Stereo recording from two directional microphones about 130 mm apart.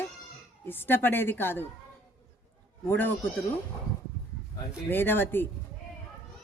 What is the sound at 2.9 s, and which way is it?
Speech, 15° left (ahead or behind).